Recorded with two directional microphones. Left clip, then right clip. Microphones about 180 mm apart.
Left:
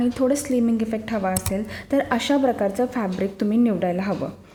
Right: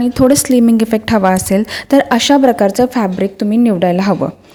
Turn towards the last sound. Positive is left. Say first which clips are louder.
# right 11 dB
turn(degrees=-40)  # may be behind; listen again after turning